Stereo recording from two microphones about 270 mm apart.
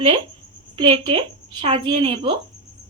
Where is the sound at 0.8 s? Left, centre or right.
Centre.